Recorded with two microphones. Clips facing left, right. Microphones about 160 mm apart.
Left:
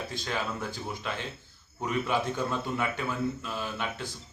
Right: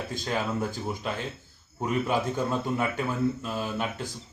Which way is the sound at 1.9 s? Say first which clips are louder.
Right 2 dB; 40° right (ahead or behind).